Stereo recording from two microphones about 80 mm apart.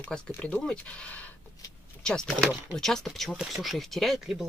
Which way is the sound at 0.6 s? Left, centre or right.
Centre.